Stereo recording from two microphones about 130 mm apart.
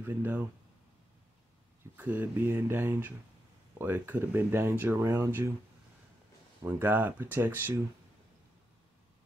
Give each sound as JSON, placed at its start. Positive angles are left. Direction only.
{"t": 0.0, "sound": "speech", "side_deg": -15}
{"t": 2.0, "sound": "speech", "side_deg": -15}
{"t": 6.6, "sound": "speech", "side_deg": -15}